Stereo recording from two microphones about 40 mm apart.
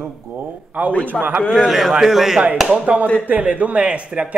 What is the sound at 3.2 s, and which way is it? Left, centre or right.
Speech, right.